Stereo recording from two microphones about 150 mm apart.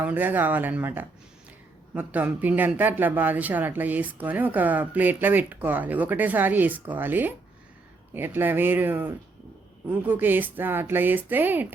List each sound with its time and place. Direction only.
0.0 s speech: 10° right (ahead or behind)